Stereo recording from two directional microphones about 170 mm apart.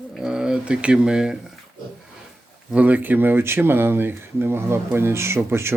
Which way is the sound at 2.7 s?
10° right (ahead or behind).